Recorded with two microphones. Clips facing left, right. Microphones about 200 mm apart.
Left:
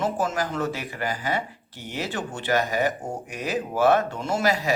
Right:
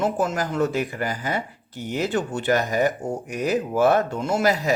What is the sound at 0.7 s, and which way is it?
Speech, 45° right (ahead or behind).